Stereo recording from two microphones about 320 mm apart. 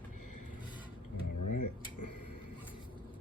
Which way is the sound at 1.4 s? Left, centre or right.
Left.